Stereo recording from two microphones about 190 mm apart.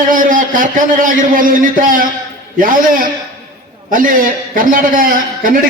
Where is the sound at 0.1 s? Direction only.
45° right (ahead or behind).